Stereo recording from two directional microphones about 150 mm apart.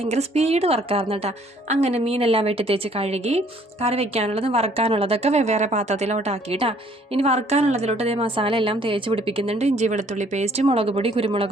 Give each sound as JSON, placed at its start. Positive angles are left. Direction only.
{"t": 0.0, "sound": "a woman's voice", "side_deg": -45}